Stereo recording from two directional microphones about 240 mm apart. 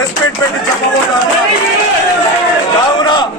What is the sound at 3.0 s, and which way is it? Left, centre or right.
Speech, centre.